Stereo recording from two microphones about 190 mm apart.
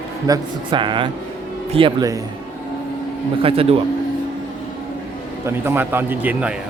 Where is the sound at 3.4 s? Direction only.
30° right (ahead or behind).